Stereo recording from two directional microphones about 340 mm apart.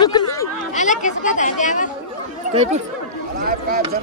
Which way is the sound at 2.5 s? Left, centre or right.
Centre.